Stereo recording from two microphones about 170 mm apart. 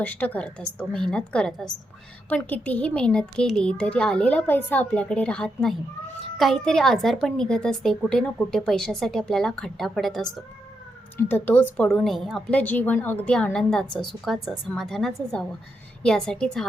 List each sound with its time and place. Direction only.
0.0 s a woman's voice: 10° left (ahead or behind)